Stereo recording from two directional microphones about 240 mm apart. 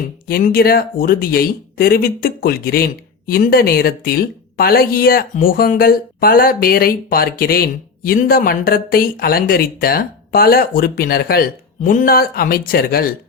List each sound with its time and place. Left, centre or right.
0.3 s speech: left